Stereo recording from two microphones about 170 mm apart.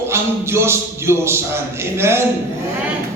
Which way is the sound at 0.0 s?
15° right (ahead or behind).